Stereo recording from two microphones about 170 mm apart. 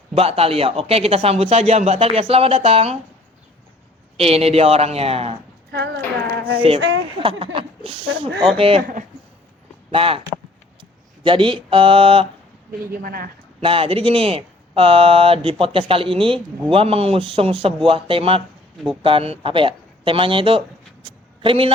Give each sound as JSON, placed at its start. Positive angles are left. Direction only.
{"t": 0.2, "sound": "speech", "side_deg": -35}
{"t": 4.2, "sound": "speech", "side_deg": -35}
{"t": 5.7, "sound": "speech", "side_deg": -75}
{"t": 6.7, "sound": "speech", "side_deg": -90}
{"t": 7.2, "sound": "speech", "side_deg": -30}
{"t": 9.9, "sound": "speech", "side_deg": -35}
{"t": 11.2, "sound": "speech", "side_deg": -30}
{"t": 12.9, "sound": "speech", "side_deg": -60}
{"t": 13.6, "sound": "speech", "side_deg": -30}
{"t": 21.0, "sound": "a sound", "side_deg": -30}